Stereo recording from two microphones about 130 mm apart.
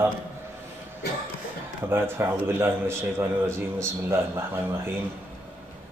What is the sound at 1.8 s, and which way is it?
A man's voice, 20° right (ahead or behind).